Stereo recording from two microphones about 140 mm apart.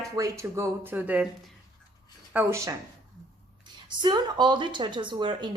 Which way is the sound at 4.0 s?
30° right (ahead or behind).